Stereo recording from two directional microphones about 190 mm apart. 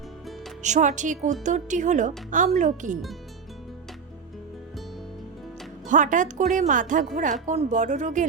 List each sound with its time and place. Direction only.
0.6 s a woman's voice: 40° right (ahead or behind)
5.9 s a woman's voice: 40° right (ahead or behind)